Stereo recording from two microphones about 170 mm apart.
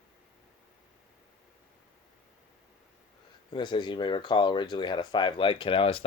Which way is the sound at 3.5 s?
30° left (ahead or behind).